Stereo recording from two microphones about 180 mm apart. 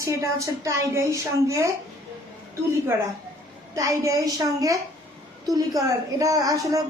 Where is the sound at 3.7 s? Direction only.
20° right (ahead or behind).